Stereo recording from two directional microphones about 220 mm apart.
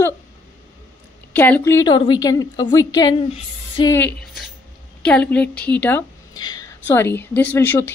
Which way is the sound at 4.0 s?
5° left (ahead or behind).